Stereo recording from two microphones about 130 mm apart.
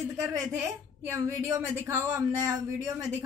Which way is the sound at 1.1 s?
25° right (ahead or behind).